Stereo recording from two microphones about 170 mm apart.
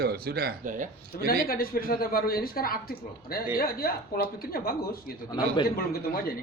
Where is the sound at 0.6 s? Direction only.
50° right (ahead or behind).